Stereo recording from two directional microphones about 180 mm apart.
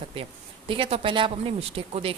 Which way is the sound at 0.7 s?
30° right (ahead or behind).